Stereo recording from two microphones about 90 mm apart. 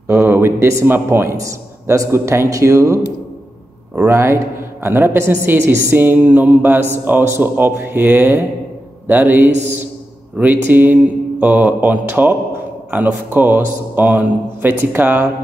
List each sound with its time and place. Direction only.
0.1 s a man's voice: 30° right (ahead or behind)
1.3 s a woman's voice: 35° right (ahead or behind)